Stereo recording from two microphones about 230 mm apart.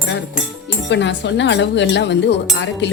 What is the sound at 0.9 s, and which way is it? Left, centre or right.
Speech, left.